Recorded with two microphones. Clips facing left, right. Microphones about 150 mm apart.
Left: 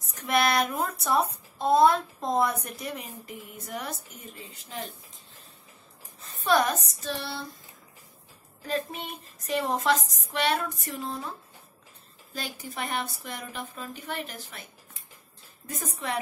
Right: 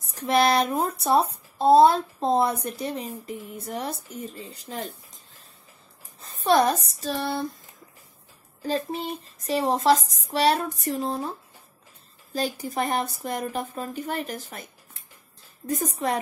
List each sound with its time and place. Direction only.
0.0 s speech: 30° right (ahead or behind)
6.2 s speech: 35° right (ahead or behind)
8.6 s speech: 35° right (ahead or behind)
12.4 s a woman's voice: 40° right (ahead or behind)